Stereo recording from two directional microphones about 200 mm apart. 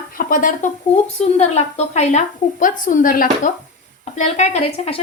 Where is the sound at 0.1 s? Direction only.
45° left (ahead or behind).